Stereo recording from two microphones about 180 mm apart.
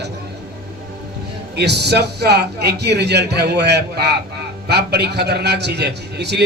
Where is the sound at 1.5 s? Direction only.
65° right (ahead or behind).